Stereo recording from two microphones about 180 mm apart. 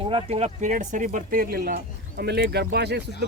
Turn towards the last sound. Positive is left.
turn(degrees=-65)  # may be behind; listen again after turning